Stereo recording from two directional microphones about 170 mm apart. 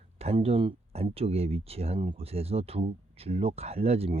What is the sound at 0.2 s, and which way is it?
Speech, 35° right (ahead or behind).